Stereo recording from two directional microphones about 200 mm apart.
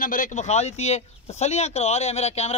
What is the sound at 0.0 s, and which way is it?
Speech, 40° left (ahead or behind).